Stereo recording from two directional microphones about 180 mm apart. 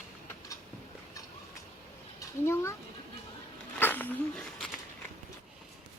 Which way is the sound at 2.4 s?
15° left (ahead or behind).